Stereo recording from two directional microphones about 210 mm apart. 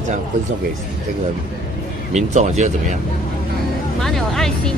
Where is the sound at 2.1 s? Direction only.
35° right (ahead or behind).